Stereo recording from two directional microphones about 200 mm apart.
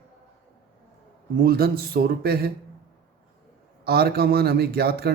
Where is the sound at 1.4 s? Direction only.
50° right (ahead or behind).